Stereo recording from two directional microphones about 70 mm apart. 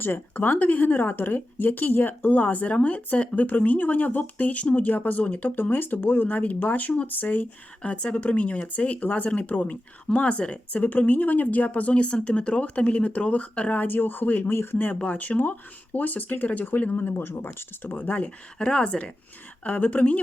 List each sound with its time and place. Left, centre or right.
0.0 s speech: left